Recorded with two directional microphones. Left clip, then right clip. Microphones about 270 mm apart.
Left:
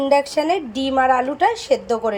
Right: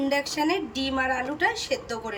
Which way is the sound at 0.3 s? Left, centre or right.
Centre.